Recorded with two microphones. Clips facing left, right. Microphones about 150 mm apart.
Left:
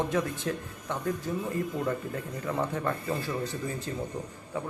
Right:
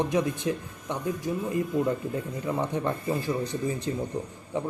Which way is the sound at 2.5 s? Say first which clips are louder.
Right 2 dB; 20° right (ahead or behind).